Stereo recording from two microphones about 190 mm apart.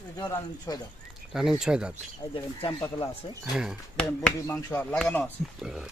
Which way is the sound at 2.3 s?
25° left (ahead or behind).